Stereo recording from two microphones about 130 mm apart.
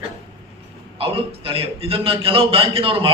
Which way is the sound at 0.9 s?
45° right (ahead or behind).